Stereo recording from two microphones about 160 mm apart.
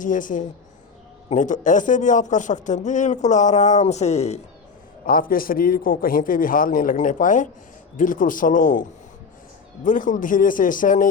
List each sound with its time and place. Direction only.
0.0 s a man's voice: 55° left (ahead or behind)
5.0 s a man's voice: 60° left (ahead or behind)